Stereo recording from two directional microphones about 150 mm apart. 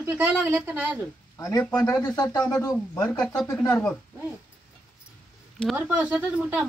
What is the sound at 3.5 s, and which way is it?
Speech, 10° left (ahead or behind).